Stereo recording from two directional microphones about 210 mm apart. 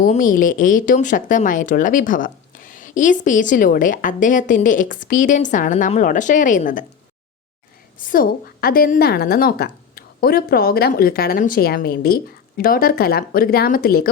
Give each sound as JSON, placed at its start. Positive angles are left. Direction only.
{"t": 0.0, "sound": "speech", "side_deg": 40}
{"t": 7.9, "sound": "a woman's voice", "side_deg": 40}